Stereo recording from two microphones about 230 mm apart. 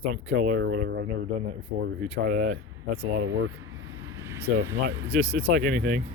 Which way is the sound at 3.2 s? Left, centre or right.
Right.